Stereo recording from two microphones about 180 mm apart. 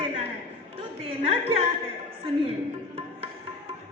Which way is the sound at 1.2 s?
30° right (ahead or behind).